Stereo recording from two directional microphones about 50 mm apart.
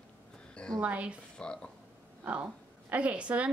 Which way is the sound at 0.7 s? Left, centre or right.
Right.